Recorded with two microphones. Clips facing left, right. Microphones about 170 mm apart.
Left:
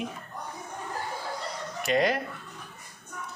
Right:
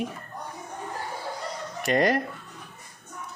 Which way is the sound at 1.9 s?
45° right (ahead or behind).